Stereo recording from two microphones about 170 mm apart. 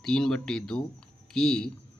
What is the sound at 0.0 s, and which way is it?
Speech, 5° left (ahead or behind).